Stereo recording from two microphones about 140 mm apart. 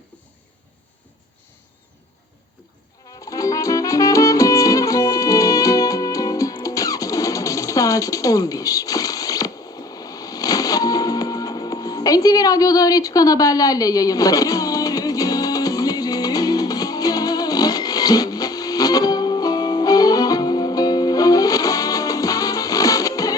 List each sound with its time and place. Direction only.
3.2 s music: 25° left (ahead or behind)